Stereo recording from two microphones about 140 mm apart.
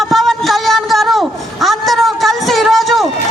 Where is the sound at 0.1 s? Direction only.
Centre (ahead or behind).